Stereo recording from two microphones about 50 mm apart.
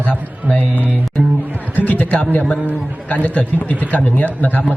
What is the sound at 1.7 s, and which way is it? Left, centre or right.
Music, left.